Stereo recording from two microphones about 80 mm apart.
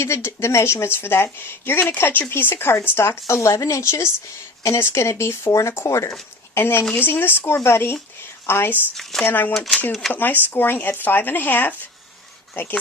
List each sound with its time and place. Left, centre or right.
0.0 s a woman's voice: left